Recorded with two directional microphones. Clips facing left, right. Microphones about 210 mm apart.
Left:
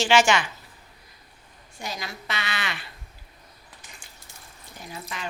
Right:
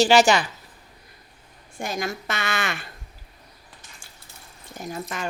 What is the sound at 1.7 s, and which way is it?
A woman's voice, 50° right (ahead or behind).